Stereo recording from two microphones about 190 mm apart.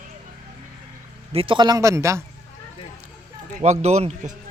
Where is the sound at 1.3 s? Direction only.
30° right (ahead or behind).